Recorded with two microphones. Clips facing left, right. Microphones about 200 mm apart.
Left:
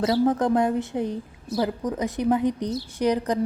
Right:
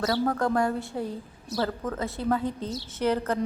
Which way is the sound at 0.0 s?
20° left (ahead or behind).